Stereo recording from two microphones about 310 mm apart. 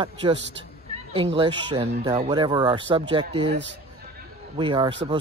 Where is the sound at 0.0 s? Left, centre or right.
Centre.